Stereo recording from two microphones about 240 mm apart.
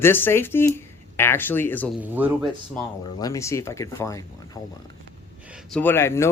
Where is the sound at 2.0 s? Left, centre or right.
Centre.